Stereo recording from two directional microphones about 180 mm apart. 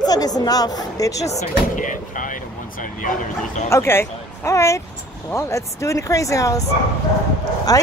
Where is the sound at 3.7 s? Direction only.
15° left (ahead or behind).